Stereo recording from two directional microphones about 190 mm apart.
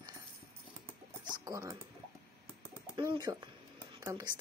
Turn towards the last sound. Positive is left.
turn(degrees=-20)  # may be behind; listen again after turning